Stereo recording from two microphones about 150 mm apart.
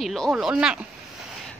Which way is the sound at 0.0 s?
Centre (ahead or behind).